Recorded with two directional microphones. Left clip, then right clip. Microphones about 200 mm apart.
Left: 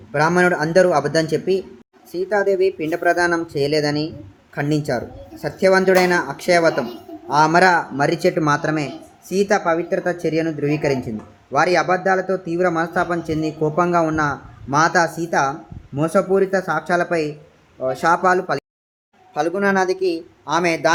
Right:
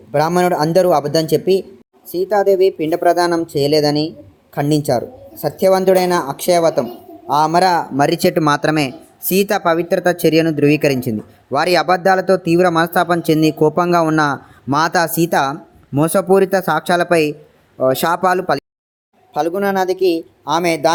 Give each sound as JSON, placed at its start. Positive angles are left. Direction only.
{"t": 0.1, "sound": "speech", "side_deg": -25}
{"t": 19.3, "sound": "speech", "side_deg": -30}